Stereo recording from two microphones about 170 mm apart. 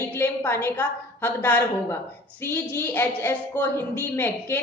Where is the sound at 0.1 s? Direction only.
15° left (ahead or behind).